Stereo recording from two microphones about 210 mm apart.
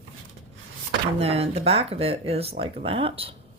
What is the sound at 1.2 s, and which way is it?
Speech, 30° right (ahead or behind).